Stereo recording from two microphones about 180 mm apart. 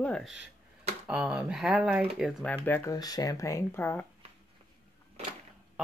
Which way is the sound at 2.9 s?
20° left (ahead or behind).